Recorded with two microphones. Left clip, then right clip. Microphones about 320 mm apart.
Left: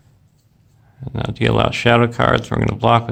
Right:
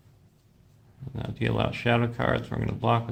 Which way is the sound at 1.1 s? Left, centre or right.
Left.